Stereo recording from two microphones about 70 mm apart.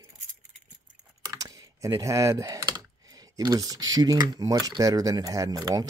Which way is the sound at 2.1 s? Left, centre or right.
Right.